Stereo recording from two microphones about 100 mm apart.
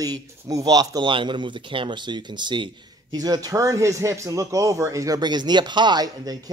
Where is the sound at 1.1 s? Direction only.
55° right (ahead or behind).